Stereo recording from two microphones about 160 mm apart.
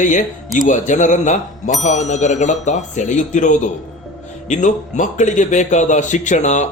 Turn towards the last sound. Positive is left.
turn(degrees=50)  # may be behind; listen again after turning